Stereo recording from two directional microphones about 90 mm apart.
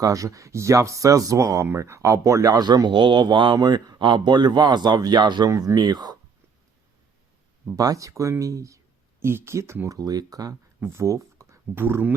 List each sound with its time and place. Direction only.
0.0 s speech: 40° right (ahead or behind)
7.8 s speech: 40° right (ahead or behind)
9.8 s speech: 40° right (ahead or behind)
10.8 s speech: 30° right (ahead or behind)